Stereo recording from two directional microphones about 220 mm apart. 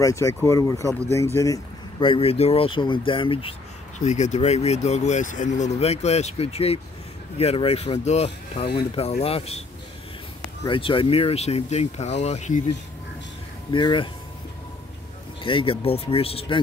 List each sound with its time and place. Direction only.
0.0 s speech: 15° left (ahead or behind)
10.6 s speech: 25° left (ahead or behind)
13.7 s speech: 20° left (ahead or behind)
15.4 s speech: 25° left (ahead or behind)